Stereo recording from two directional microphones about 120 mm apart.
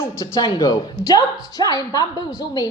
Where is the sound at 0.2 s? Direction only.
30° left (ahead or behind).